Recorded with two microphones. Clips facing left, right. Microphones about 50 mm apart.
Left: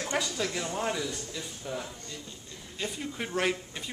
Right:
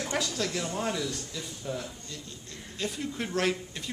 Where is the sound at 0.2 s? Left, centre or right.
Centre.